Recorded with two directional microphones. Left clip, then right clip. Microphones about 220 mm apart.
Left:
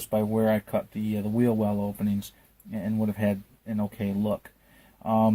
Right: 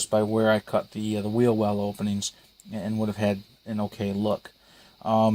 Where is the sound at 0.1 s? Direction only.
25° right (ahead or behind).